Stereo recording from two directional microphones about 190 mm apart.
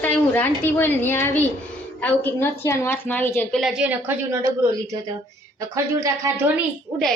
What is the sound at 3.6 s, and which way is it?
A woman's voice, 5° right (ahead or behind).